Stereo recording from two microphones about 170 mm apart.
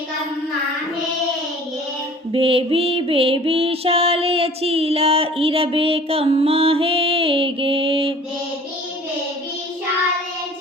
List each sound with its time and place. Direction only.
2.3 s music: 35° right (ahead or behind)